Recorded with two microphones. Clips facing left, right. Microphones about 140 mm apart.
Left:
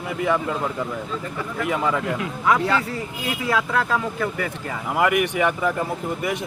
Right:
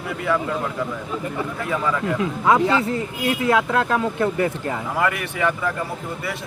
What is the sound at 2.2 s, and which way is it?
Speech, 20° right (ahead or behind).